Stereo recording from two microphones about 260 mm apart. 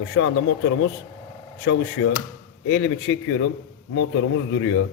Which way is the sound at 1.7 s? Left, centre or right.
Left.